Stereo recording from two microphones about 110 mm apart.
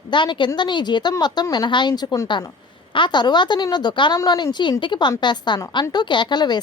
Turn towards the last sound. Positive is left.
turn(degrees=40)  # may be behind; listen again after turning